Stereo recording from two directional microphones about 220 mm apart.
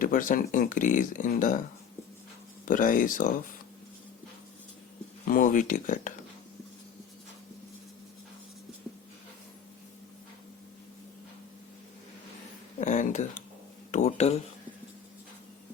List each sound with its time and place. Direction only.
0.0 s speech: 40° left (ahead or behind)
2.6 s speech: 40° left (ahead or behind)
5.2 s speech: 40° left (ahead or behind)
12.8 s speech: 35° left (ahead or behind)